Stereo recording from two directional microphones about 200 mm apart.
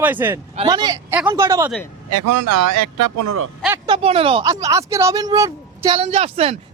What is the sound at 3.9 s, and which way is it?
Speech, 30° right (ahead or behind).